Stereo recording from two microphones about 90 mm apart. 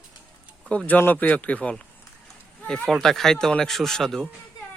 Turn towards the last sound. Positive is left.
turn(degrees=5)  # may be behind; listen again after turning